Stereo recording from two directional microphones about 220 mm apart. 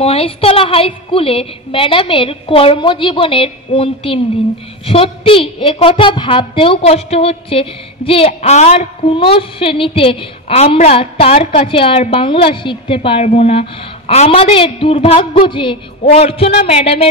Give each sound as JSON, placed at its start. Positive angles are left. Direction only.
{"t": 0.0, "sound": "a woman's voice", "side_deg": 25}